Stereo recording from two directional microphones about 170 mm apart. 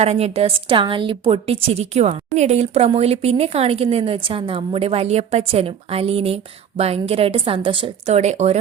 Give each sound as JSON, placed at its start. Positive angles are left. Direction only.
{"t": 0.0, "sound": "a woman's voice", "side_deg": -40}